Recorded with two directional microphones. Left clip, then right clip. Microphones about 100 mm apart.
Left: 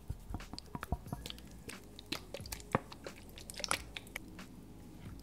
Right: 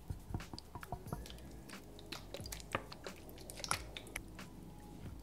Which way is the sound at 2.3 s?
10° left (ahead or behind).